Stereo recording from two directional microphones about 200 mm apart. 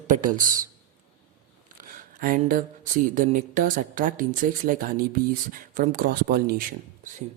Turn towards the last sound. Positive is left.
turn(degrees=-45)  # may be behind; listen again after turning